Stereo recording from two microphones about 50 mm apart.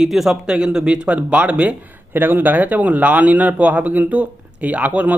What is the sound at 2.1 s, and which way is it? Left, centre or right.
A man's voice, right.